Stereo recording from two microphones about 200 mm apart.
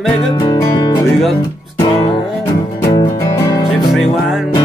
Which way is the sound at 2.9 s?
20° left (ahead or behind).